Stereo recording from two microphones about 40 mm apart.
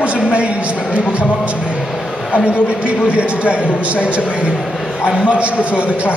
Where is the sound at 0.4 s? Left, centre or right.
Right.